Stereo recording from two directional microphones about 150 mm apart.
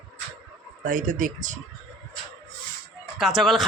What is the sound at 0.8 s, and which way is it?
Speech, 60° right (ahead or behind).